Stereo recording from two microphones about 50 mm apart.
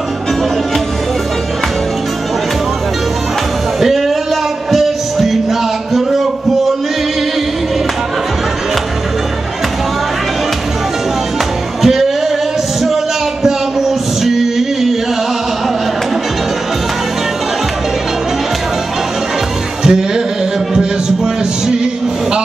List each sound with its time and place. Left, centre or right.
4.7 s music: centre
11.8 s music: centre
12.8 s a sound: centre
19.8 s music: centre